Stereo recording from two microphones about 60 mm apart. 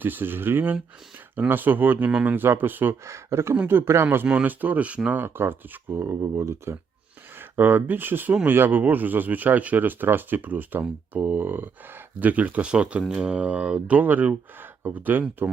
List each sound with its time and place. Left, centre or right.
0.0 s speech: right
3.0 s speech: right
4.0 s speech: right
5.1 s speech: right
7.3 s speech: right